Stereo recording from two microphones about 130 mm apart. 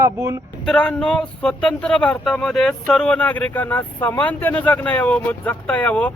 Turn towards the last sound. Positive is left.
turn(degrees=10)  # may be behind; listen again after turning